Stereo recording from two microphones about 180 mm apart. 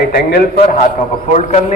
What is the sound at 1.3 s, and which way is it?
Speech, 40° left (ahead or behind).